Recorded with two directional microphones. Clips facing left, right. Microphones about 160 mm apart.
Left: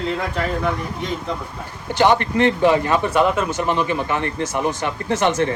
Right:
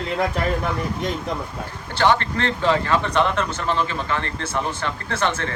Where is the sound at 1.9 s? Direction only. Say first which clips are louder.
Left 3 dB; 15° left (ahead or behind).